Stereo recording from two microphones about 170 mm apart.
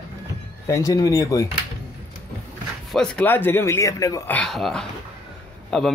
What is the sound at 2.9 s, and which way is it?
Speech, 5° left (ahead or behind).